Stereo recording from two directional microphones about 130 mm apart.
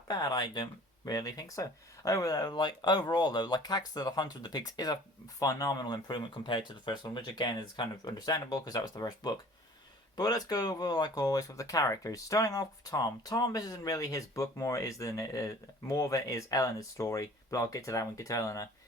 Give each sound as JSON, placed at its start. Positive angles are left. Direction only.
{"t": 0.1, "sound": "speech", "side_deg": 30}